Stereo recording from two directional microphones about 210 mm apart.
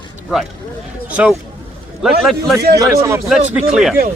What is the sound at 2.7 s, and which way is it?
Speech, 15° right (ahead or behind).